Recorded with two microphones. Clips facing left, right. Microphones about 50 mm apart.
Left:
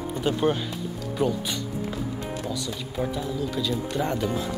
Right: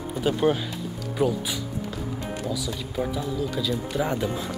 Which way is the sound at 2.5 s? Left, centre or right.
Centre.